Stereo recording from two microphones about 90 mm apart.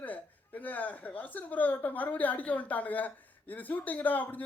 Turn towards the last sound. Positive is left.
turn(degrees=20)  # may be behind; listen again after turning